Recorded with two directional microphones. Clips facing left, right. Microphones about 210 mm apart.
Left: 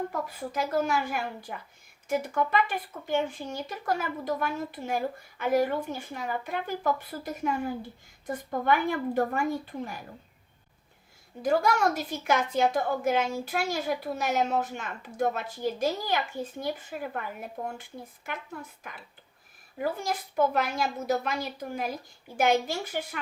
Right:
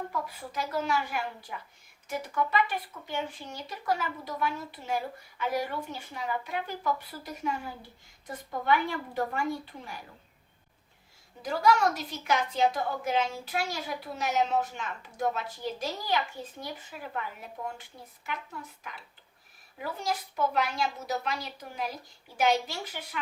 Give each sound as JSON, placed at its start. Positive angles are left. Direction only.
{"t": 0.5, "sound": "speech", "side_deg": 50}
{"t": 11.4, "sound": "speech", "side_deg": 50}
{"t": 19.8, "sound": "speech", "side_deg": 50}